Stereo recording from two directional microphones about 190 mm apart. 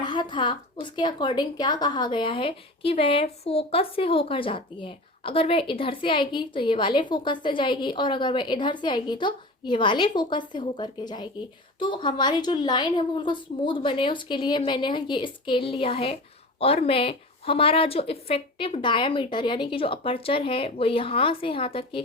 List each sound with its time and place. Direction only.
0.0 s a woman's voice: 25° left (ahead or behind)